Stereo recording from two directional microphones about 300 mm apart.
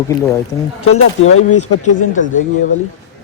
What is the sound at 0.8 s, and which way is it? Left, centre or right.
Speech, left.